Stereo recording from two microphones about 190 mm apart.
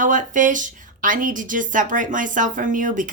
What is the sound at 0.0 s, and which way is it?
A woman's voice, 40° right (ahead or behind).